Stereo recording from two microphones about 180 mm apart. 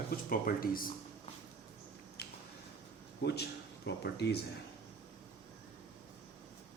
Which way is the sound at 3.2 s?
65° left (ahead or behind).